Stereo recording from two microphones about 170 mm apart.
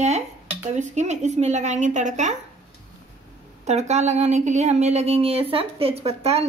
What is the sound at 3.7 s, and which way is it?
Speech, 40° right (ahead or behind).